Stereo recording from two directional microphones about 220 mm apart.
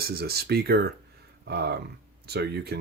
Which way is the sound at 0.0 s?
45° right (ahead or behind).